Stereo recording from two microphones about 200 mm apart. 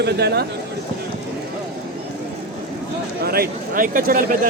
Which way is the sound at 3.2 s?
50° right (ahead or behind).